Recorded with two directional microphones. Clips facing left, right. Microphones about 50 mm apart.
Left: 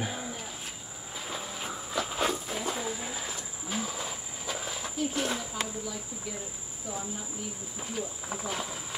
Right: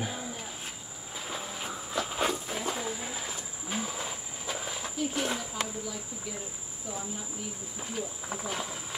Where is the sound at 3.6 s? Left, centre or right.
Centre.